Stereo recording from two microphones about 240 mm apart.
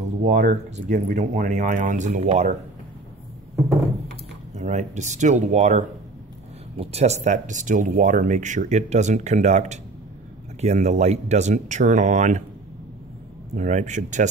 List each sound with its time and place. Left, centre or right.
0.2 s speech: right
4.6 s speech: right
13.6 s speech: right